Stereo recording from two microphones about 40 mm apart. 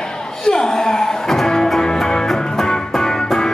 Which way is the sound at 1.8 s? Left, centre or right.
Centre.